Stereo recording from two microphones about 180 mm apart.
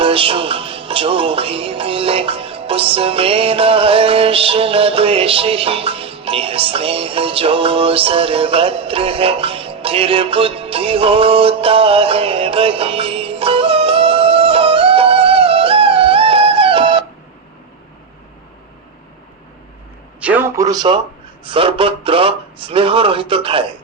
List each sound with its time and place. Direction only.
0.0 s music: 30° right (ahead or behind)
20.1 s a man's voice: 10° right (ahead or behind); by 23.7 s 30° right (ahead or behind)